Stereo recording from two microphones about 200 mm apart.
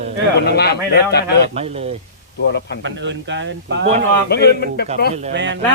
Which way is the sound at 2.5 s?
55° left (ahead or behind).